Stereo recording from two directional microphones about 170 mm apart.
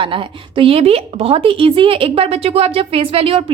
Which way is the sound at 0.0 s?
30° right (ahead or behind).